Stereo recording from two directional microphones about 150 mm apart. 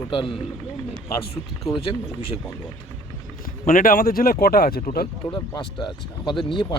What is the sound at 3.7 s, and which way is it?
Speech, 65° left (ahead or behind).